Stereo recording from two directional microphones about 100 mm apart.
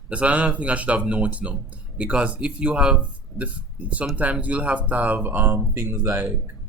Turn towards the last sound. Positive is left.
turn(degrees=-20)  # may be behind; listen again after turning